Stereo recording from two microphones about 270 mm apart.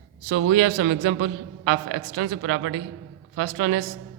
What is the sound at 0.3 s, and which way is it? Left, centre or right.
A man's voice, right.